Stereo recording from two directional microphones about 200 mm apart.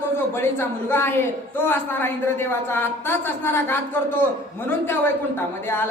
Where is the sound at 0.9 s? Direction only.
10° left (ahead or behind).